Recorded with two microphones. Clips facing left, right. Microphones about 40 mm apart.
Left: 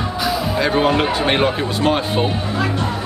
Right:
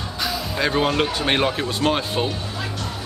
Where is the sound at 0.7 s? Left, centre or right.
Centre.